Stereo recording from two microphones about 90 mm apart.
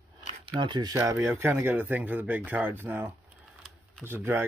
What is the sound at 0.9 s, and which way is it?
Speech, 35° right (ahead or behind).